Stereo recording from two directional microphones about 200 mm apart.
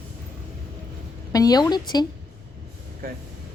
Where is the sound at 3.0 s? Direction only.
45° right (ahead or behind).